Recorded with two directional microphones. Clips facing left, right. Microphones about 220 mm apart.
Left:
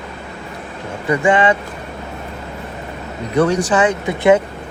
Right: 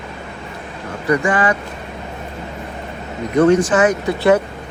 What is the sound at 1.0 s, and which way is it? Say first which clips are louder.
Speech: left 2 dB; 25° left (ahead or behind).